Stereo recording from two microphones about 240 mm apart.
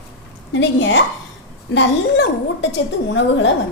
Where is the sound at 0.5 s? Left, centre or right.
Left.